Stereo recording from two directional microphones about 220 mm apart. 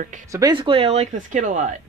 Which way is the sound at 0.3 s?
20° right (ahead or behind).